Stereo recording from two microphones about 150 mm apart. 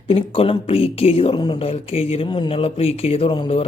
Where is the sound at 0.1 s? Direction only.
40° left (ahead or behind).